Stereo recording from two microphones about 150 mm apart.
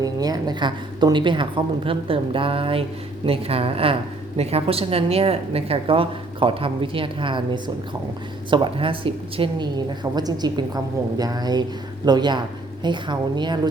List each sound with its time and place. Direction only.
0.0 s a woman's voice: 25° right (ahead or behind)